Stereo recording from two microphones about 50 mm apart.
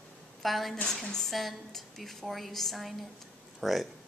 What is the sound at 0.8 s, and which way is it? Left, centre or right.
A woman's voice, centre.